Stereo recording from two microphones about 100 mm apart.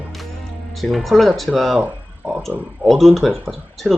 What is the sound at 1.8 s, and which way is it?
Speech, 15° right (ahead or behind).